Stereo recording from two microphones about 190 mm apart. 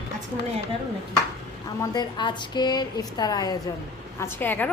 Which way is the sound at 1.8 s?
20° left (ahead or behind).